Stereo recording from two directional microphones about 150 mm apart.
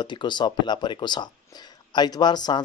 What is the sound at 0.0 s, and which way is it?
Speech, 30° left (ahead or behind).